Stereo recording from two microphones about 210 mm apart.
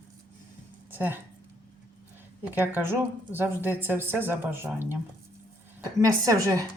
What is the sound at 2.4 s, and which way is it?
Speech, 10° right (ahead or behind).